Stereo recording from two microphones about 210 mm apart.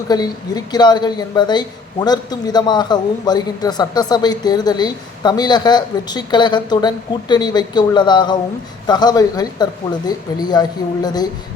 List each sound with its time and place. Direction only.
0.1 s a woman's voice: 20° left (ahead or behind)